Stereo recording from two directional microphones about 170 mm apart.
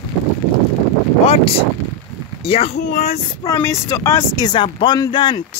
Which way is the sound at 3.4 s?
15° left (ahead or behind).